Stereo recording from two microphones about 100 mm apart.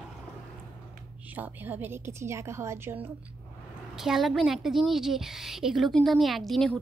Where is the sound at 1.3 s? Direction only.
20° right (ahead or behind).